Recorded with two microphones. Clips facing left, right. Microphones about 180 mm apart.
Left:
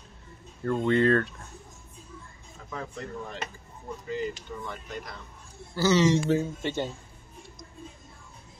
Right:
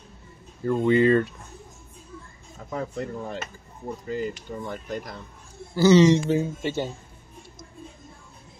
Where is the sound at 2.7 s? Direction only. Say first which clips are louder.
Right 6 dB; 35° right (ahead or behind).